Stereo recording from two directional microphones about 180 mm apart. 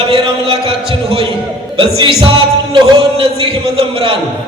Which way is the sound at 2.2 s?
30° right (ahead or behind).